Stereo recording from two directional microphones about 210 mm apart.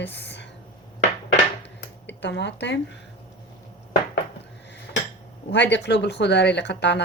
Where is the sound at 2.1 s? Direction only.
55° left (ahead or behind).